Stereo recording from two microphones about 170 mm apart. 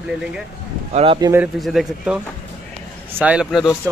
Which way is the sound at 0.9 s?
30° right (ahead or behind).